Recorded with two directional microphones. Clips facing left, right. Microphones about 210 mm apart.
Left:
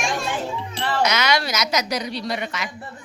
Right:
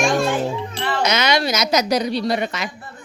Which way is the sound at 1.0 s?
25° right (ahead or behind).